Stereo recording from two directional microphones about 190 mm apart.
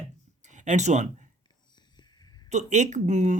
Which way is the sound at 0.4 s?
40° right (ahead or behind).